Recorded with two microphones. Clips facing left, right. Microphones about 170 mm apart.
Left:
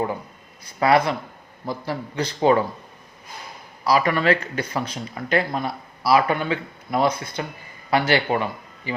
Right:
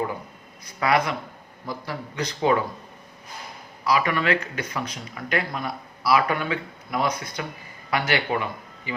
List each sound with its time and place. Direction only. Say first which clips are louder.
0.6 s a man's voice: left 4 dB; 30° left (ahead or behind)
3.8 s a man's voice: left 3 dB; 35° left (ahead or behind)